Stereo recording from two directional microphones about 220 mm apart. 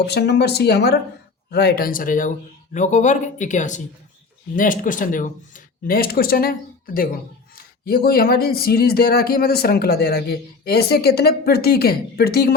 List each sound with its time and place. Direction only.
0.0 s speech: 50° left (ahead or behind)